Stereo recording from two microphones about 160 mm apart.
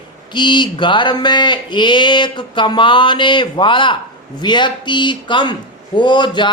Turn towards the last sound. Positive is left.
turn(degrees=30)  # may be behind; listen again after turning